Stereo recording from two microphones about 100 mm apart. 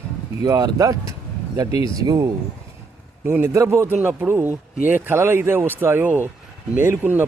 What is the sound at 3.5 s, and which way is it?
Speech, 30° right (ahead or behind).